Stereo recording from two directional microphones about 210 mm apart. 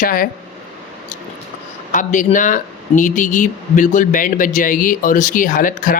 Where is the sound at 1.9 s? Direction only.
35° left (ahead or behind).